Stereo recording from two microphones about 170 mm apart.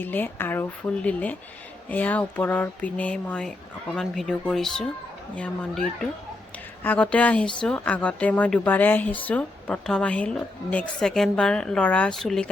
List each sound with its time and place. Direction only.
0.0 s speech: 10° left (ahead or behind)